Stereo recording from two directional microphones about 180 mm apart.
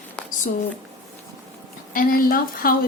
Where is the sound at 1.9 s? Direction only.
50° left (ahead or behind).